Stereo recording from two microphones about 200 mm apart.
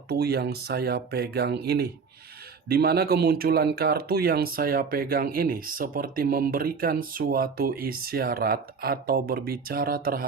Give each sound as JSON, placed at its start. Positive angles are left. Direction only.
{"t": 0.1, "sound": "speech", "side_deg": -55}